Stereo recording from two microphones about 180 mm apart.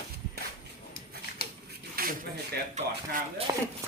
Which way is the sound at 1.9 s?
55° right (ahead or behind).